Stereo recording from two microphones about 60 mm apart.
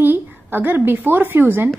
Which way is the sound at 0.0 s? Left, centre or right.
Right.